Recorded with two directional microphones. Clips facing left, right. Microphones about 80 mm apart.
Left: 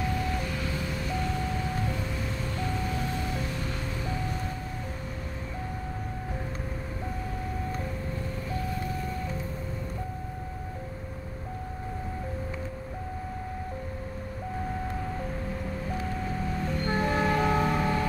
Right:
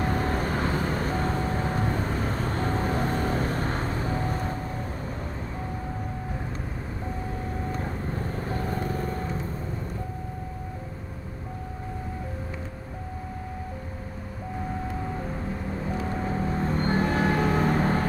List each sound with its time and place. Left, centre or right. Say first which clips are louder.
0.0 s vehicle: right 4 dB; right
8.5 s vehicle: right 3 dB; right
16.0 s music: right 4 dB; right